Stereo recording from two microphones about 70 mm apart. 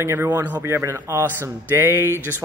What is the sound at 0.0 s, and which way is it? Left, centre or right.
Speech, right.